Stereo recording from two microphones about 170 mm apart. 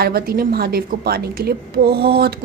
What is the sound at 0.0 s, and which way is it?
A woman's voice, 60° right (ahead or behind).